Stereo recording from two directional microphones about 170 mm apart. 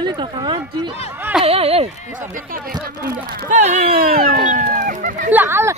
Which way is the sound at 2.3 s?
55° right (ahead or behind).